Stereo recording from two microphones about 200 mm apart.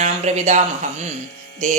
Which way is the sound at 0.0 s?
35° right (ahead or behind).